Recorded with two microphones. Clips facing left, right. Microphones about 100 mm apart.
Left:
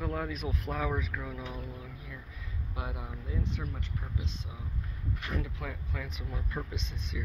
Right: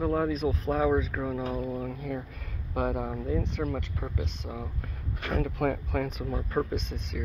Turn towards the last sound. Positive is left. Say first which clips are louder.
# right 6 dB
turn(degrees=-55)  # may be behind; listen again after turning